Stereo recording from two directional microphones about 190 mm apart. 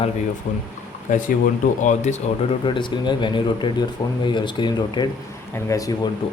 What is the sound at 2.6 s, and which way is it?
Speech, 25° left (ahead or behind).